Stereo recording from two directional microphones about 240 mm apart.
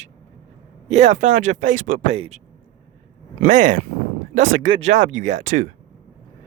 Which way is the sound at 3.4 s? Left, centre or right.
Right.